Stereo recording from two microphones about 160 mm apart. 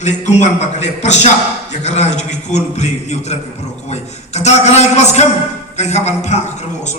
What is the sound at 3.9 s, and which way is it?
A man's voice, 45° left (ahead or behind).